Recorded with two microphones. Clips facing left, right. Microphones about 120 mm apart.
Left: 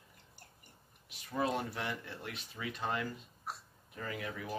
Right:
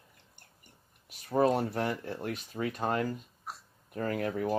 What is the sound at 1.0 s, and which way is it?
Speech, 45° right (ahead or behind).